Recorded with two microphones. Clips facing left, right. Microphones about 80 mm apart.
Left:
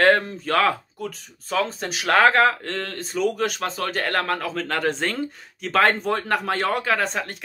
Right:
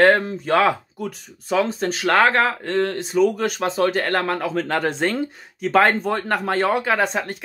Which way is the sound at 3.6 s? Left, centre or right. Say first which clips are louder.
Right 7 dB; right.